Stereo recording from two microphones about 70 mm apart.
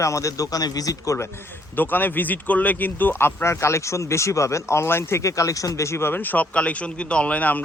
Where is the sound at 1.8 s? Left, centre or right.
Left.